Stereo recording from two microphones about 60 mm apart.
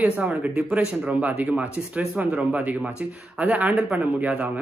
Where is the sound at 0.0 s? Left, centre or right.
Right.